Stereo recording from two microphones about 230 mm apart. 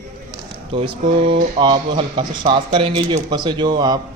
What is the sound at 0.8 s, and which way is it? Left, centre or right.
A man's voice, right.